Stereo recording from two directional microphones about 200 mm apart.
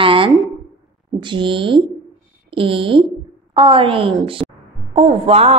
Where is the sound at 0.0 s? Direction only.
25° right (ahead or behind).